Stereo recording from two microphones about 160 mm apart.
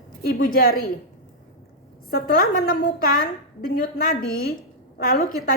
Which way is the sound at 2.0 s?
65° left (ahead or behind).